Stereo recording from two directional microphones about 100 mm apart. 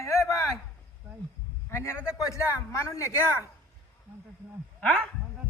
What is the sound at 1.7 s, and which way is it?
A man's voice, 25° left (ahead or behind).